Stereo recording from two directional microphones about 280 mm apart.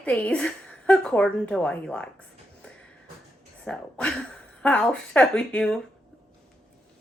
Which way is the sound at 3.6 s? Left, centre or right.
Centre.